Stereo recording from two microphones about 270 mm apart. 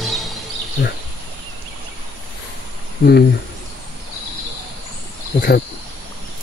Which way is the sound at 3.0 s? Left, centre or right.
Left.